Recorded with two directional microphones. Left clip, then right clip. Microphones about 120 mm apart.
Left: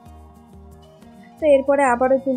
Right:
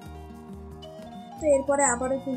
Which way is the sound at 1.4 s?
90° left.